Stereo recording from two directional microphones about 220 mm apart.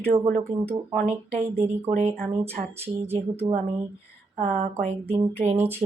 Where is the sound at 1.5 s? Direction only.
10° right (ahead or behind).